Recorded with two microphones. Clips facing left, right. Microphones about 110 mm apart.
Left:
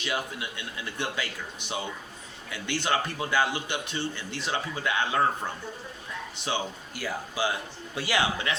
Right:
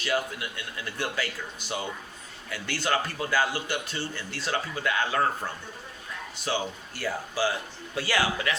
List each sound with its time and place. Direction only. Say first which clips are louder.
0.0 s a man's voice: right 3 dB; 20° left (ahead or behind)
6.4 s a man's voice: right 2 dB; 15° left (ahead or behind)